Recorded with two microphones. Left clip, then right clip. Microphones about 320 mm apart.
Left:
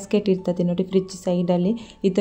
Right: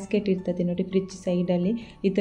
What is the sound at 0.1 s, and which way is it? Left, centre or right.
A woman's voice, left.